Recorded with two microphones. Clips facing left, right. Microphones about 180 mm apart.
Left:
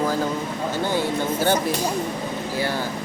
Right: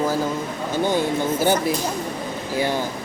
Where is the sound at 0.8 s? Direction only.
15° right (ahead or behind).